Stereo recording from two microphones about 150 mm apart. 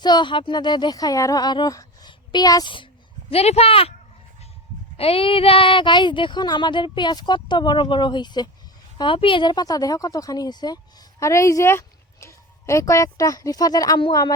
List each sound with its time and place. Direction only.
0.0 s speech: 30° left (ahead or behind)
4.9 s a woman's voice: 40° left (ahead or behind); by 14.3 s 25° left (ahead or behind)